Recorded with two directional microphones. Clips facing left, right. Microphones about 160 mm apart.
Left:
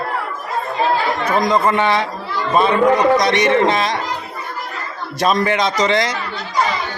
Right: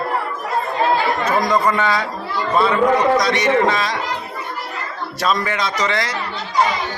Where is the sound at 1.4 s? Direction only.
20° left (ahead or behind).